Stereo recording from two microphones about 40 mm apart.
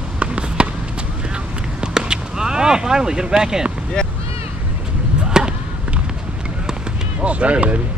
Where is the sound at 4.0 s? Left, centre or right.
Centre.